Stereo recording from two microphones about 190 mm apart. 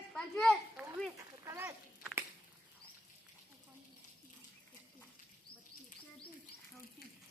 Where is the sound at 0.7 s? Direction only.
10° right (ahead or behind).